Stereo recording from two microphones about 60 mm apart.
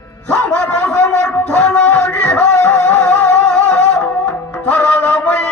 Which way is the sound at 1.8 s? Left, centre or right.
Left.